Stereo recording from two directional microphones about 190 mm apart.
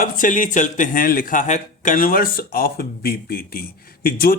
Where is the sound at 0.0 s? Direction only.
45° left (ahead or behind).